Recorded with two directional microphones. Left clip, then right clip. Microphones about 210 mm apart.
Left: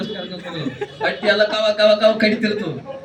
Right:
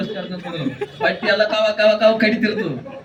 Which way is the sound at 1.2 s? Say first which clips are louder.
Left 2 dB; 20° left (ahead or behind).